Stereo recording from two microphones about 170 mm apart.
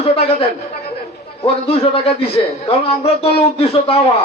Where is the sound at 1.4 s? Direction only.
35° left (ahead or behind).